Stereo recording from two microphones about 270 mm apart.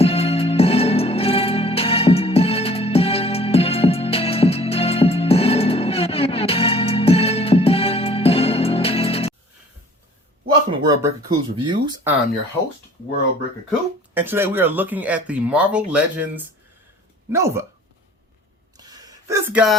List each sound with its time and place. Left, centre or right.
0.0 s music: left
10.8 s speech: centre
13.7 s speech: centre
18.8 s a sound: centre